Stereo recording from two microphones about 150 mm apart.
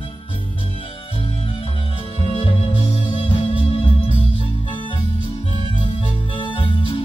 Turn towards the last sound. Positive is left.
turn(degrees=35)  # may be behind; listen again after turning